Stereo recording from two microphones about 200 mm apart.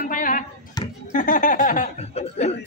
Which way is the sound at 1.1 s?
40° left (ahead or behind).